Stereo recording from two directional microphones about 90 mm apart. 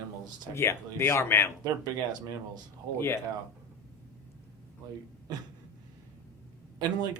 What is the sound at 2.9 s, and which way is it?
Speech, 25° left (ahead or behind).